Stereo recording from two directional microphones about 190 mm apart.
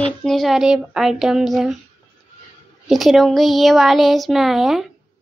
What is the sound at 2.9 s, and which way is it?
Speech, centre (ahead or behind).